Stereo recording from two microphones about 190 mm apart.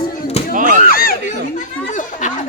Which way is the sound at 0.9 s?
50° left (ahead or behind).